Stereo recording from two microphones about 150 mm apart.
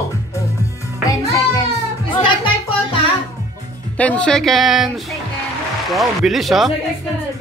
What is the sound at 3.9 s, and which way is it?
Speech, 10° left (ahead or behind).